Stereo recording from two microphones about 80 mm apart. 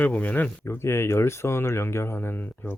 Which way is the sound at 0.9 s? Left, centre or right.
Left.